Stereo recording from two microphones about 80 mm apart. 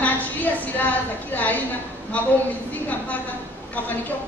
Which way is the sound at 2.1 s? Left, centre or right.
Centre.